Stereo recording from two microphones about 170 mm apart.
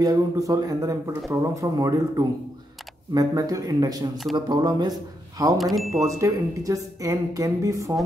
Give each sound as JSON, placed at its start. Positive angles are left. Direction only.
{"t": 0.0, "sound": "a woman's voice", "side_deg": -20}
{"t": 5.6, "sound": "speech", "side_deg": 0}
{"t": 6.0, "sound": "a woman's voice", "side_deg": -20}